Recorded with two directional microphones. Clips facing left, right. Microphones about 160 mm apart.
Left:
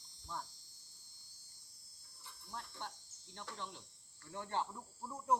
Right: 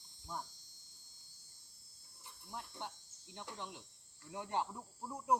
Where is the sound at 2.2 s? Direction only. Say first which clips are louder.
Right 1 dB; 20° right (ahead or behind).